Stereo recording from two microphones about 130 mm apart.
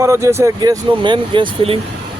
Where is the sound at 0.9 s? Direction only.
40° right (ahead or behind).